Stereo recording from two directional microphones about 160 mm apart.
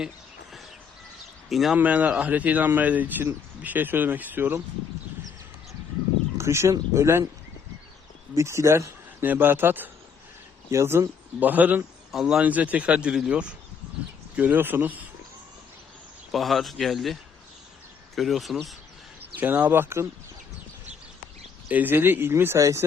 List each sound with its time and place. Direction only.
1.5 s speech: centre (ahead or behind)
6.3 s speech: 15° right (ahead or behind)
8.4 s speech: 20° right (ahead or behind)
16.3 s speech: centre (ahead or behind)
19.4 s speech: 10° right (ahead or behind)
21.7 s speech: 10° right (ahead or behind)